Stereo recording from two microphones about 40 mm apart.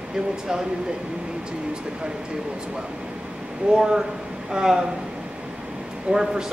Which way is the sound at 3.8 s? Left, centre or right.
Centre.